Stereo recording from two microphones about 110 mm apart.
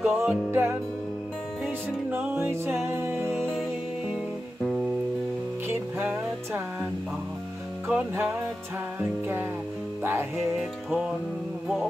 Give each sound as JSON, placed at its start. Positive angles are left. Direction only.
{"t": 0.0, "sound": "music", "side_deg": -5}
{"t": 2.0, "sound": "music", "side_deg": -15}
{"t": 5.7, "sound": "music", "side_deg": -20}
{"t": 7.9, "sound": "music", "side_deg": -15}